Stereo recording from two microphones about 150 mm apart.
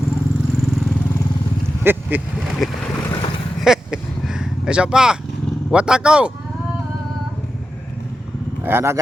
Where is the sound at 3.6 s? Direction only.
5° right (ahead or behind).